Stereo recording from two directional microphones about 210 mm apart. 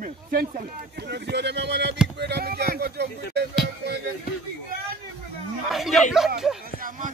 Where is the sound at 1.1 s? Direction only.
55° right (ahead or behind).